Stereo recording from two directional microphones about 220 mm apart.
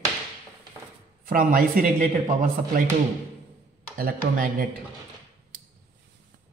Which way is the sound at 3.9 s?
40° right (ahead or behind).